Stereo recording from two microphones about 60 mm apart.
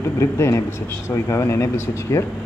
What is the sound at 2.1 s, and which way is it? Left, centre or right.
Speech, left.